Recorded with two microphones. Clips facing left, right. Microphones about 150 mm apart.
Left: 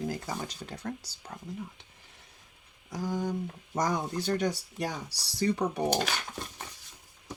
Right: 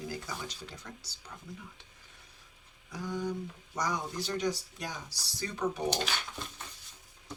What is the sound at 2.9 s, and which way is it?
Speech, 35° left (ahead or behind).